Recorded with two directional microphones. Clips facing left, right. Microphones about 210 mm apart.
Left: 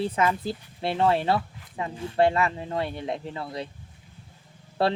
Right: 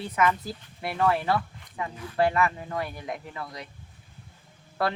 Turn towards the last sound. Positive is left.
turn(degrees=30)  # may be behind; listen again after turning